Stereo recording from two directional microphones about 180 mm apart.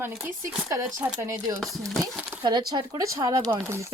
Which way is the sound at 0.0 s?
15° right (ahead or behind).